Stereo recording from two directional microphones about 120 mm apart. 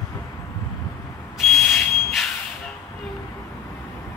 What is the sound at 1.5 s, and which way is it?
Whistle, centre (ahead or behind).